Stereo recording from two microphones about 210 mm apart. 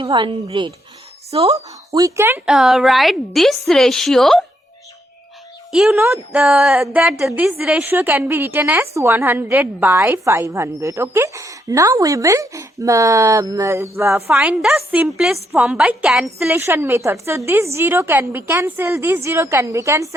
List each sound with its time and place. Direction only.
0.0 s a woman's voice: 25° right (ahead or behind)
1.5 s speech: 15° right (ahead or behind); by 4.4 s centre (ahead or behind)
5.7 s a woman's voice: centre (ahead or behind)